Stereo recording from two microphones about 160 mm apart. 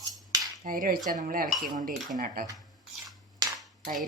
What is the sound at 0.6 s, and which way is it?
Speech, 60° right (ahead or behind).